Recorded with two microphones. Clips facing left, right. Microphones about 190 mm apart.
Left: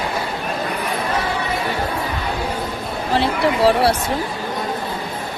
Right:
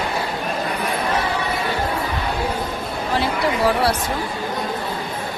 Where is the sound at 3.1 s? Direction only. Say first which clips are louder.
Left 3 dB; 25° left (ahead or behind).